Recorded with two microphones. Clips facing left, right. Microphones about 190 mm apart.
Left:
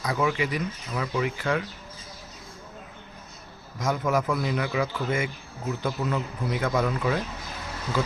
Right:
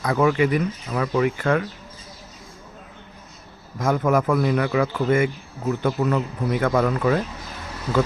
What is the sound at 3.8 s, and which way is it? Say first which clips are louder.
Speech: right 5 dB; 55° right (ahead or behind).